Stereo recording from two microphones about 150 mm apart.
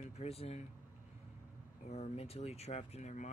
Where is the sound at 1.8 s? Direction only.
50° left (ahead or behind).